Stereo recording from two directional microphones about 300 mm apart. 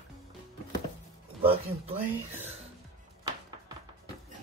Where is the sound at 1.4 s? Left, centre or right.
Centre.